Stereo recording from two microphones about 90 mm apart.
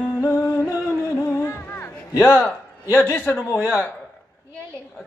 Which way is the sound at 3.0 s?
10° left (ahead or behind).